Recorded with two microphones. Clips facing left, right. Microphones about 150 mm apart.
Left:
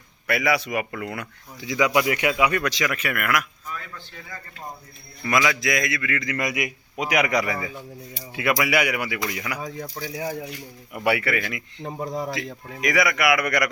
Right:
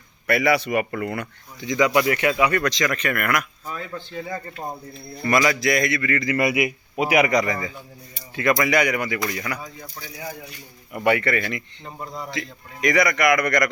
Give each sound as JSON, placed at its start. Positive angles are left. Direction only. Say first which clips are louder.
{"t": 0.3, "sound": "a man's voice", "louder": "right 3 dB", "side_deg": 0}
{"t": 3.7, "sound": "speech", "louder": "right 5 dB", "side_deg": -25}
{"t": 5.2, "sound": "a man's voice", "louder": "right 3 dB", "side_deg": 0}
{"t": 9.6, "sound": "speech", "louder": "left 7 dB", "side_deg": 90}
{"t": 10.9, "sound": "a man's voice", "louder": "right 3 dB", "side_deg": 10}